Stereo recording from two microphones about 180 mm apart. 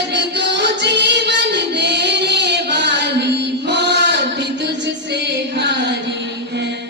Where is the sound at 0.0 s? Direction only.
75° right (ahead or behind).